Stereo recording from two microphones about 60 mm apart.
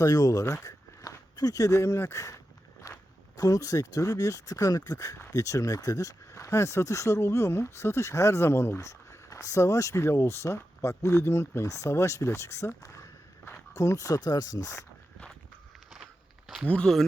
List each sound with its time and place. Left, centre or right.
0.0 s speech: left
2.8 s walk: left
3.3 s speech: left
10.0 s speech: left
16.6 s speech: centre